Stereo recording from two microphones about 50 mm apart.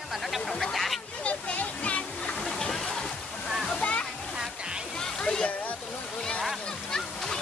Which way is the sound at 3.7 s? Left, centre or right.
Left.